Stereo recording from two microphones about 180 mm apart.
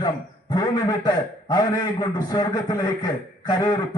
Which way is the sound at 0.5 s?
25° left (ahead or behind).